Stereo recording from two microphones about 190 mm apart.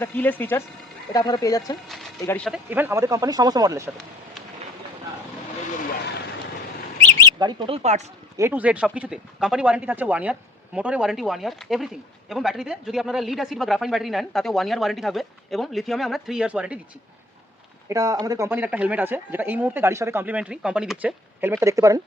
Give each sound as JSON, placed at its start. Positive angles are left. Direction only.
{"t": 0.0, "sound": "speech", "side_deg": 10}
{"t": 1.1, "sound": "speech", "side_deg": 20}
{"t": 1.9, "sound": "a sound", "side_deg": 0}
{"t": 2.2, "sound": "speech", "side_deg": 10}
{"t": 2.5, "sound": "speech", "side_deg": -10}
{"t": 7.3, "sound": "speech", "side_deg": -25}
{"t": 8.4, "sound": "speech", "side_deg": -10}
{"t": 17.8, "sound": "speech", "side_deg": -20}